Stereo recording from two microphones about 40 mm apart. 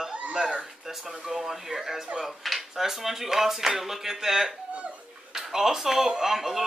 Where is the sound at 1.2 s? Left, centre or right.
Centre.